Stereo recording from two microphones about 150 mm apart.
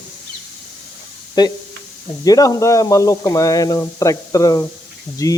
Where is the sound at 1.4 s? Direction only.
30° left (ahead or behind).